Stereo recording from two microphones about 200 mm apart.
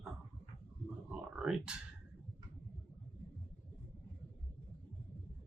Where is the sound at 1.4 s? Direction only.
5° right (ahead or behind).